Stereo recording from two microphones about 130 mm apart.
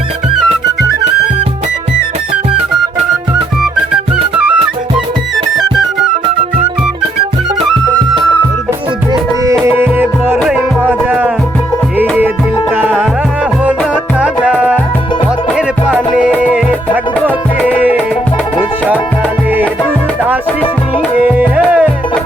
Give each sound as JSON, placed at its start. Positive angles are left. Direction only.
{"t": 9.6, "sound": "music", "side_deg": -15}
{"t": 10.3, "sound": "music", "side_deg": 0}
{"t": 10.8, "sound": "music", "side_deg": -10}
{"t": 12.7, "sound": "music", "side_deg": -15}
{"t": 14.2, "sound": "music", "side_deg": -10}
{"t": 21.2, "sound": "music", "side_deg": -10}